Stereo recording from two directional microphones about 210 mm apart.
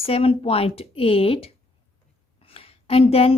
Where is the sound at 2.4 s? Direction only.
25° left (ahead or behind).